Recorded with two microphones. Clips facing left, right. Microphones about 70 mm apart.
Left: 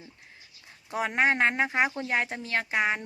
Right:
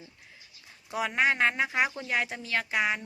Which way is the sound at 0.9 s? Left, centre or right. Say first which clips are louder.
Left 1 dB; left.